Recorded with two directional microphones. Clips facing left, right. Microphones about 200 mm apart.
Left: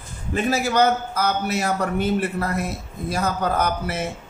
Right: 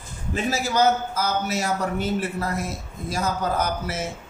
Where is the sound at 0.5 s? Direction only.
60° left (ahead or behind).